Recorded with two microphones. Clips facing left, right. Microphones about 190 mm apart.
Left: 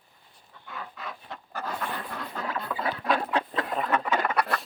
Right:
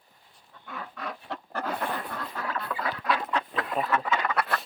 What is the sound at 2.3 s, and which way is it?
Chicken, 20° left (ahead or behind).